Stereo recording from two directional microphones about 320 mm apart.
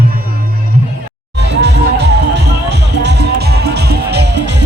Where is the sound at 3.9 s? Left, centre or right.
Right.